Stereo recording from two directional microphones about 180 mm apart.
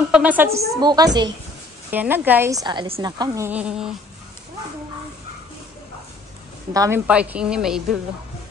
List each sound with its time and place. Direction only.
0.1 s a woman's voice: 10° right (ahead or behind)
0.7 s a woman's voice: 20° right (ahead or behind)
1.9 s a woman's voice: 10° right (ahead or behind)
3.4 s a woman's voice: 5° right (ahead or behind)
6.7 s a woman's voice: 20° right (ahead or behind)
7.1 s a woman's voice: 5° right (ahead or behind)